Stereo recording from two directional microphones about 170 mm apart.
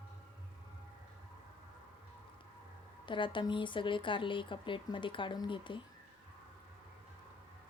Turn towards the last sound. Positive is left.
turn(degrees=30)  # may be behind; listen again after turning